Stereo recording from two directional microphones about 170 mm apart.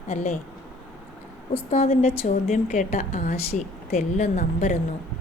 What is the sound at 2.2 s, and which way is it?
A woman's voice, 50° left (ahead or behind).